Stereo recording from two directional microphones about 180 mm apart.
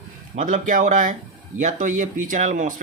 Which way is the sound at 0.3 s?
45° right (ahead or behind).